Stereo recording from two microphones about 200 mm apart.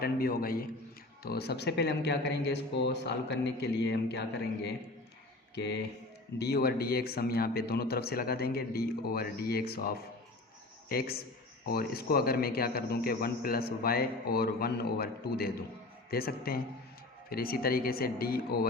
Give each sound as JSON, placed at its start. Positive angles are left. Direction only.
{"t": 0.0, "sound": "a man's voice", "side_deg": 50}